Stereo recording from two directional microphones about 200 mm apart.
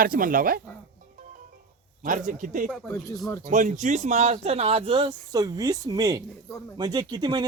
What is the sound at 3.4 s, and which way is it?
Speech, 40° right (ahead or behind).